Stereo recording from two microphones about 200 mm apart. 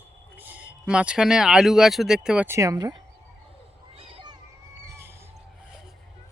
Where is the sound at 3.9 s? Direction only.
30° right (ahead or behind).